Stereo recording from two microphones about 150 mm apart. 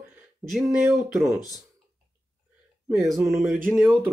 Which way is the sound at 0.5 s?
Centre (ahead or behind).